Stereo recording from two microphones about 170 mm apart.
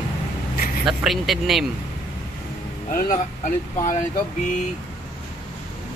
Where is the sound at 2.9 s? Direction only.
55° left (ahead or behind).